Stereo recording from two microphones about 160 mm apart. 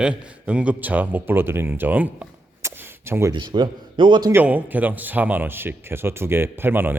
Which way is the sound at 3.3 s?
30° right (ahead or behind).